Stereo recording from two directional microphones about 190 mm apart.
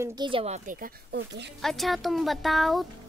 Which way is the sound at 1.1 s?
65° right (ahead or behind).